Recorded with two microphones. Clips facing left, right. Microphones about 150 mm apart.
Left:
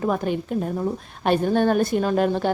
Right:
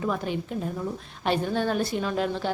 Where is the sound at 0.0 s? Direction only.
45° left (ahead or behind).